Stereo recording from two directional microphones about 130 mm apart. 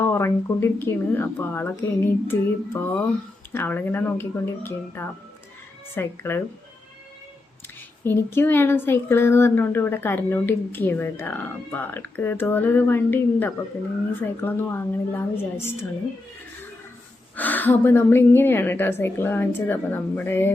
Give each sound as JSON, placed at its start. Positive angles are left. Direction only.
{"t": 0.0, "sound": "speech", "side_deg": 20}
{"t": 8.0, "sound": "speech", "side_deg": 20}
{"t": 17.3, "sound": "speech", "side_deg": 15}